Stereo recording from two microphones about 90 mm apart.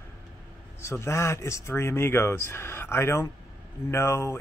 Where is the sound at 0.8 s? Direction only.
30° left (ahead or behind).